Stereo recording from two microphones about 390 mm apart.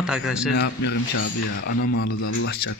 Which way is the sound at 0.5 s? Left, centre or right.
Left.